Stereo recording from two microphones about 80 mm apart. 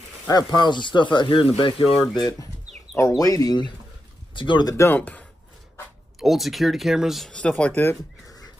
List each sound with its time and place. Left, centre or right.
0.3 s speech: left
3.0 s speech: left
4.4 s speech: left
4.7 s speech: left
6.1 s speech: centre
7.2 s speech: centre